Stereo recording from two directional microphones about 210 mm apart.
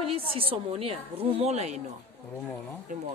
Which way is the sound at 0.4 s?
25° right (ahead or behind).